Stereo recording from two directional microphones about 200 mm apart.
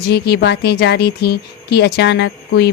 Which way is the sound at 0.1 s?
55° left (ahead or behind).